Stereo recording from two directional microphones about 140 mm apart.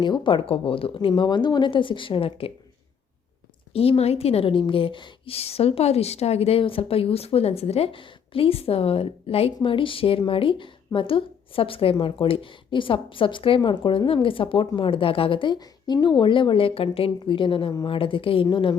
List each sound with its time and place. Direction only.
0.0 s a woman's voice: 35° left (ahead or behind)
3.7 s a woman's voice: 45° left (ahead or behind)